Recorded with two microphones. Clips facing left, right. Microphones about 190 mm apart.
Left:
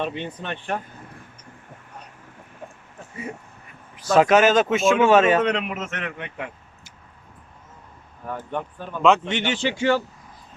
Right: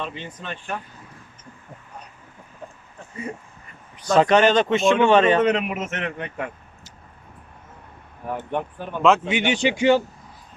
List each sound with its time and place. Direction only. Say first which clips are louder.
0.0 s speech: left 4 dB; 60° left (ahead or behind)
3.9 s speech: even; centre (ahead or behind)
5.8 s a man's voice: right 3 dB; 25° right (ahead or behind)
6.1 s speech: right 3 dB; 45° right (ahead or behind)
8.5 s speech: right 2 dB; centre (ahead or behind)
9.4 s speech: right 3 dB; 15° right (ahead or behind)